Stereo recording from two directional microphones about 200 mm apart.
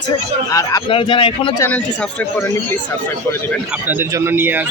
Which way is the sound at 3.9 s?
10° right (ahead or behind).